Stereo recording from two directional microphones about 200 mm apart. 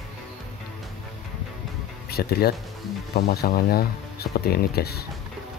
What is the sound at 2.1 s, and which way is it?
Speech, 50° left (ahead or behind).